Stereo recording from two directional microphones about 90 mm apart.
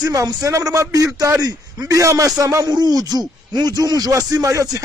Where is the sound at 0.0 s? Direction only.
40° right (ahead or behind).